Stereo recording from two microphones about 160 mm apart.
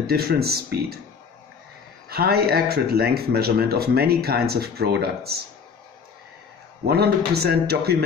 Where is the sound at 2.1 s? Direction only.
75° right (ahead or behind).